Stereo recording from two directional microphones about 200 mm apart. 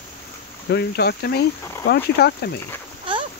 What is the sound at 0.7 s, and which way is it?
Speech, 55° left (ahead or behind).